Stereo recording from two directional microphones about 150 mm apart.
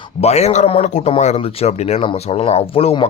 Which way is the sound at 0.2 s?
45° left (ahead or behind).